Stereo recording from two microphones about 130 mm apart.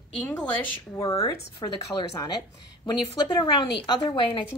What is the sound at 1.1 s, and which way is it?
Speech, 25° left (ahead or behind).